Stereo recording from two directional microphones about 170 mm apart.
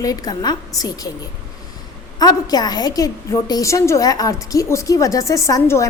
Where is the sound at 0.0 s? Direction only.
20° left (ahead or behind).